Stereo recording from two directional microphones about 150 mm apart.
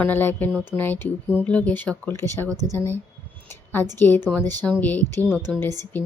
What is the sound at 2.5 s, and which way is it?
Speech, 25° right (ahead or behind).